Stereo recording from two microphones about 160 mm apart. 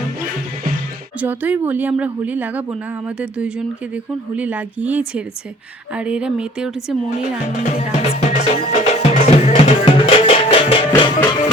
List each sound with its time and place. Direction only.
1.2 s a woman's voice: 10° right (ahead or behind)
7.2 s music: 50° left (ahead or behind); by 11.5 s 25° left (ahead or behind)